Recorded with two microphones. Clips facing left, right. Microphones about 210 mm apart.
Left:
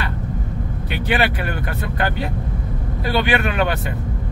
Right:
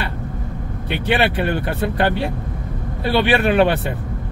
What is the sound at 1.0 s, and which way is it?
Speech, 30° right (ahead or behind).